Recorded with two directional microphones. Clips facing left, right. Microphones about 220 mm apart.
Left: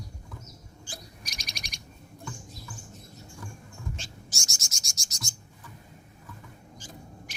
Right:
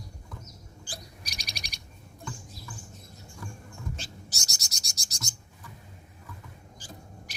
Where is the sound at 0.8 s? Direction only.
35° right (ahead or behind).